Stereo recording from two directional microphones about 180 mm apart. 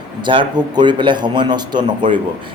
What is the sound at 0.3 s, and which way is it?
Speech, 25° right (ahead or behind).